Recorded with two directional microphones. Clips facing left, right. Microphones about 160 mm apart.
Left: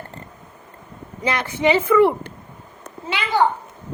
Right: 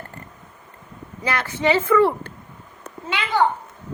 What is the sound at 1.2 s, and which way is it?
A woman's voice, 20° left (ahead or behind).